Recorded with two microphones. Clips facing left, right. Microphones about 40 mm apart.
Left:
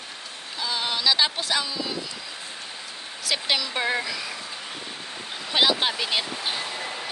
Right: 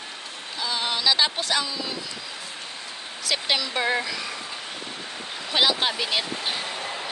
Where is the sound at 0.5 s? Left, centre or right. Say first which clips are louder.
Right 1 dB; centre.